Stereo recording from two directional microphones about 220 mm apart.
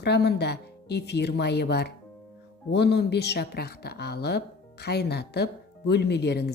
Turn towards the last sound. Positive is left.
turn(degrees=50)  # may be behind; listen again after turning